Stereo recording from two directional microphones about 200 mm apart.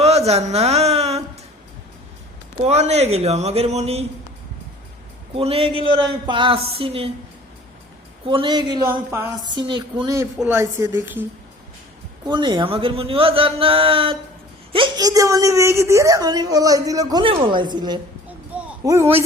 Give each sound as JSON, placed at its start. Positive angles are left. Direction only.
{"t": 0.0, "sound": "a man's voice", "side_deg": -30}
{"t": 2.6, "sound": "speech", "side_deg": -35}
{"t": 5.3, "sound": "a man's voice", "side_deg": -30}
{"t": 8.3, "sound": "a man's voice", "side_deg": -25}
{"t": 9.6, "sound": "a man's voice", "side_deg": -25}
{"t": 10.3, "sound": "a woman's voice", "side_deg": -5}
{"t": 12.2, "sound": "a man's voice", "side_deg": -20}
{"t": 18.5, "sound": "a sound", "side_deg": -5}
{"t": 18.9, "sound": "a woman's voice", "side_deg": -10}